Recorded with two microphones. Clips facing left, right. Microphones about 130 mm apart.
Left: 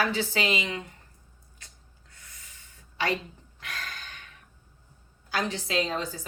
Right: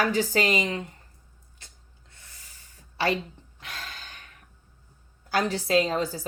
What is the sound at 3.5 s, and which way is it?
Gasp, 25° right (ahead or behind).